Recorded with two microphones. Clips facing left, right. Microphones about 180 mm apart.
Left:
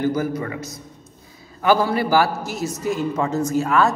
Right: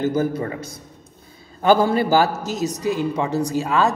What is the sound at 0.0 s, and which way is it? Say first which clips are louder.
A man's voice: right 1 dB; 25° right (ahead or behind).